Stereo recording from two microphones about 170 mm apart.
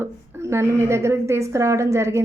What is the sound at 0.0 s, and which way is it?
A woman's voice, 15° right (ahead or behind).